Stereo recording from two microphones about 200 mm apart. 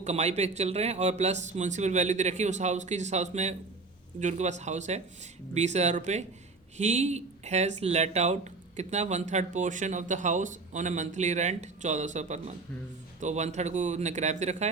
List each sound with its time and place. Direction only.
0.0 s speech: 35° right (ahead or behind)